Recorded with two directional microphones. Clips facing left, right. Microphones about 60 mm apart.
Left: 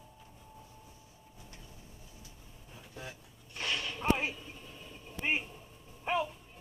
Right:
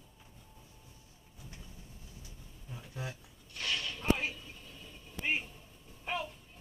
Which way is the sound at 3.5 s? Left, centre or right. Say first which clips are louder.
Left 1 dB; left.